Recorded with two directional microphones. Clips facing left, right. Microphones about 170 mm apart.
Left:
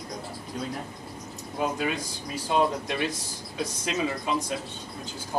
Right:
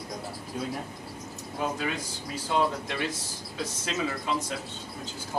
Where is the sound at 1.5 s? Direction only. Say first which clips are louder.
Left 3 dB; 15° left (ahead or behind).